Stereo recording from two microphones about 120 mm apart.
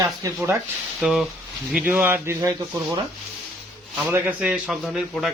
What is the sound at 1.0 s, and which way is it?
A man's voice, 5° right (ahead or behind).